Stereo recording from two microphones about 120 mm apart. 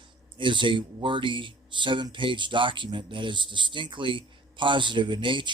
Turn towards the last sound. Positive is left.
turn(degrees=-45)  # may be behind; listen again after turning